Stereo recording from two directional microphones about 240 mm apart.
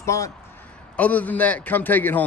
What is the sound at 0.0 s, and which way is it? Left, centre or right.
A man's voice, centre.